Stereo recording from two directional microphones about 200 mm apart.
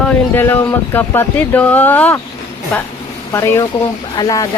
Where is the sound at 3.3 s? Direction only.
15° left (ahead or behind).